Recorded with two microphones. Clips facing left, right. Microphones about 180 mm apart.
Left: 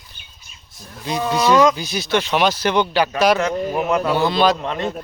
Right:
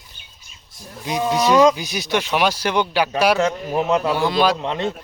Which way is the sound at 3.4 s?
25° right (ahead or behind).